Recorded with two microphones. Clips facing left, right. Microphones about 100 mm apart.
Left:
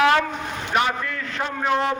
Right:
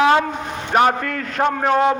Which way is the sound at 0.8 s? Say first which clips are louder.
Right 7 dB; 50° right (ahead or behind).